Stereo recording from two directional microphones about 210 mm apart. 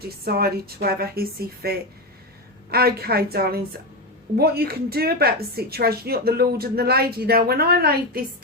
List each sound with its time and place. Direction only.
0.3 s a woman's voice: 45° right (ahead or behind)